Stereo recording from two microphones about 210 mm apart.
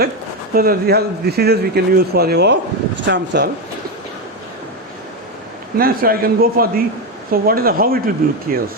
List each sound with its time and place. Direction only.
0.5 s speech: 45° right (ahead or behind)
5.7 s speech: 45° right (ahead or behind)